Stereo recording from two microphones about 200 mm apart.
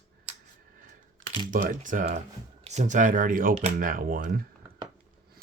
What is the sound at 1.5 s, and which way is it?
Speech, 40° right (ahead or behind).